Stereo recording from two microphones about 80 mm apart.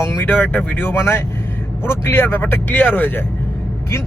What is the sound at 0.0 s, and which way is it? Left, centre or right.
Speech, left.